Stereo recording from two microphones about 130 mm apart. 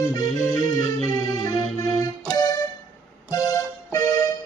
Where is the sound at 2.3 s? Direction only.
30° left (ahead or behind).